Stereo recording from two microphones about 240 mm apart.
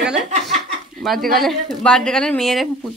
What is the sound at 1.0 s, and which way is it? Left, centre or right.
A woman's voice, centre.